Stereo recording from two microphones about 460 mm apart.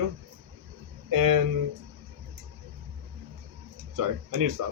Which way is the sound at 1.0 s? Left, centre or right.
Right.